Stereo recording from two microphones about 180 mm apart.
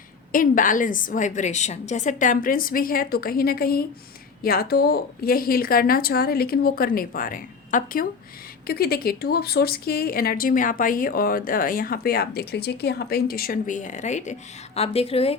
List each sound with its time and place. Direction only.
0.3 s a woman's voice: 50° left (ahead or behind)
8.6 s a woman's voice: 60° left (ahead or behind); by 15.4 s 35° left (ahead or behind)